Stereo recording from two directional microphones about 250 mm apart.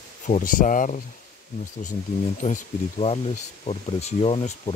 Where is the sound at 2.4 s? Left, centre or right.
Left.